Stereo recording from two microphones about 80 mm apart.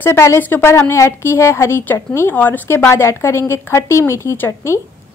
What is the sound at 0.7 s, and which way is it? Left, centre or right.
A woman's voice, left.